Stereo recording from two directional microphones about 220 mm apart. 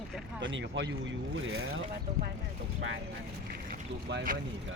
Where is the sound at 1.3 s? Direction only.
70° right (ahead or behind).